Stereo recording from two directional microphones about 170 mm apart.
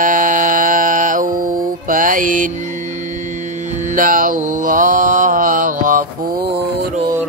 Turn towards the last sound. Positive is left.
turn(degrees=-50)  # may be behind; listen again after turning